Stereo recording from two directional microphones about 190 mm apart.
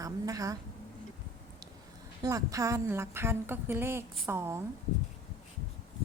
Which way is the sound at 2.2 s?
15° right (ahead or behind).